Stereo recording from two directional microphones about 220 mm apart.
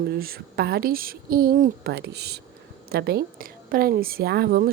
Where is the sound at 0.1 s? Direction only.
45° right (ahead or behind).